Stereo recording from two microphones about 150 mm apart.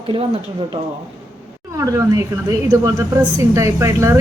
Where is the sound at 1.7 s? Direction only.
20° right (ahead or behind).